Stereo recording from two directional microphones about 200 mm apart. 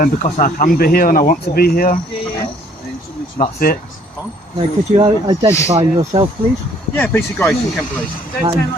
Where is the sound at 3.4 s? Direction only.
45° left (ahead or behind).